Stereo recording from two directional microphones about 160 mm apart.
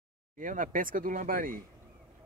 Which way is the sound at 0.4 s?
55° right (ahead or behind).